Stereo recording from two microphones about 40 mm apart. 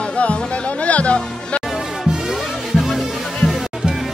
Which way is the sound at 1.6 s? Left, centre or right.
Centre.